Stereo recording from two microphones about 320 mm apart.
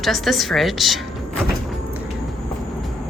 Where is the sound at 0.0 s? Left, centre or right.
Centre.